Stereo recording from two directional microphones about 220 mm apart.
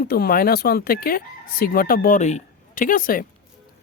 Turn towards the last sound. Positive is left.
turn(degrees=40)  # may be behind; listen again after turning